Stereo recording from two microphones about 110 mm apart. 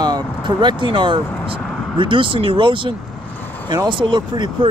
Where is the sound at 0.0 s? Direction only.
40° right (ahead or behind).